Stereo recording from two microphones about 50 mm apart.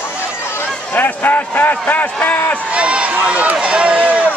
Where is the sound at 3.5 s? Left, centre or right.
Right.